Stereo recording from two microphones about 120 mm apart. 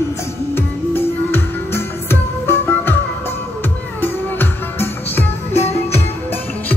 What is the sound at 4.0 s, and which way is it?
Music, 15° left (ahead or behind).